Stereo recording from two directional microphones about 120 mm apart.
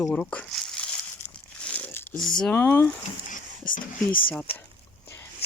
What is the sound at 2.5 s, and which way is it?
Speech, 20° left (ahead or behind).